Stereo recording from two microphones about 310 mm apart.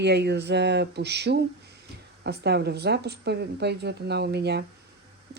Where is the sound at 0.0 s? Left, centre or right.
Right.